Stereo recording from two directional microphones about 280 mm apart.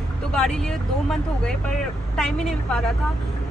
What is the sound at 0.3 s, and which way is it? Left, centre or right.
Speech, centre.